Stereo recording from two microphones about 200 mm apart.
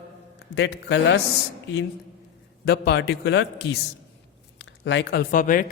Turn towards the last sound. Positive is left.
turn(degrees=40)  # may be behind; listen again after turning